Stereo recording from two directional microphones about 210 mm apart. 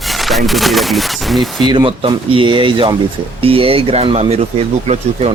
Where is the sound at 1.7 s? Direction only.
20° right (ahead or behind).